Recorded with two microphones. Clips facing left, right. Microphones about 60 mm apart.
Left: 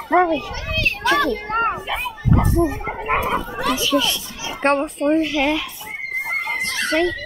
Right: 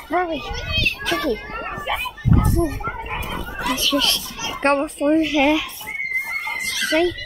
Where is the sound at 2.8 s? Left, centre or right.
Left.